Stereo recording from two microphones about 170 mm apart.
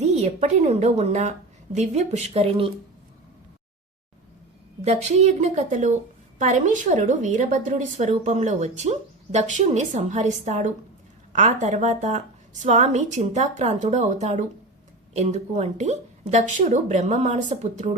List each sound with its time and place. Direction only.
0.0 s a woman's voice: 40° right (ahead or behind)
4.8 s a woman's voice: 40° right (ahead or behind)